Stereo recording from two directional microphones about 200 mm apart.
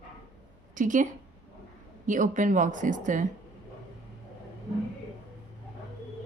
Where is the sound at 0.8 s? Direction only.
40° right (ahead or behind).